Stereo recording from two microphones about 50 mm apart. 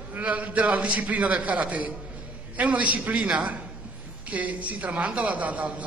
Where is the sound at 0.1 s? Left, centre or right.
Right.